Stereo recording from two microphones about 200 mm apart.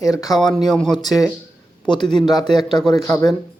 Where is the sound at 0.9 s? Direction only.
20° left (ahead or behind).